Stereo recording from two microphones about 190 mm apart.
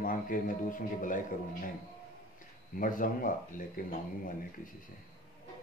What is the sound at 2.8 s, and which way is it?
Speech, 45° left (ahead or behind).